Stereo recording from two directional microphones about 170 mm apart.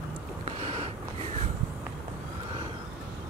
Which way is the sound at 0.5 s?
40° right (ahead or behind).